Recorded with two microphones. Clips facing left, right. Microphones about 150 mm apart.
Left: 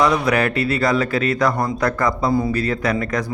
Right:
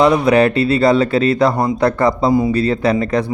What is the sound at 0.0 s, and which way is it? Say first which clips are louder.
Speech: right 6 dB; 25° right (ahead or behind).